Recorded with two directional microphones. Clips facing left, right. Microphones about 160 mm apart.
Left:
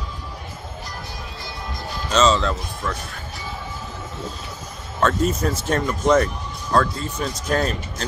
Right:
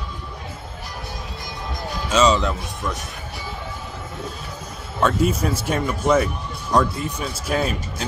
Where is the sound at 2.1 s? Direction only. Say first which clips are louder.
Even; 10° right (ahead or behind).